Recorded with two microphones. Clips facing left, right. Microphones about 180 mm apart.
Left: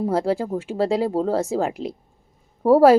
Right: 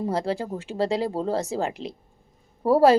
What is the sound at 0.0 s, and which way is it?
A woman's voice, 10° left (ahead or behind).